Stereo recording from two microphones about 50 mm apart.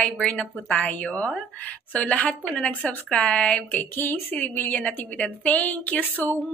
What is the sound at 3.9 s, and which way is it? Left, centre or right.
A woman's voice, left.